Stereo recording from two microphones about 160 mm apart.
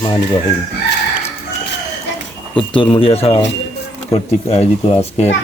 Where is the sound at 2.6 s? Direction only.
30° left (ahead or behind).